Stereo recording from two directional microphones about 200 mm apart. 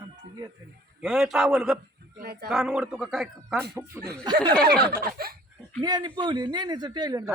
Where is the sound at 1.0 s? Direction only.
Centre (ahead or behind).